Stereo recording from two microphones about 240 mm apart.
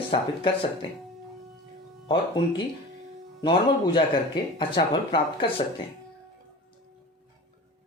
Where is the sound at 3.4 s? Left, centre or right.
Centre.